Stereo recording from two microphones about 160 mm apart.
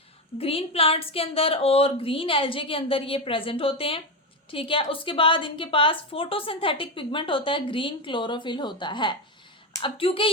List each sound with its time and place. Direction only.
0.3 s a woman's voice: 35° left (ahead or behind)